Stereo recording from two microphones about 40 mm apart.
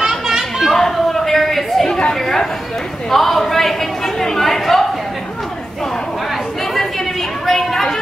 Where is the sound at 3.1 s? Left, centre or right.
Centre.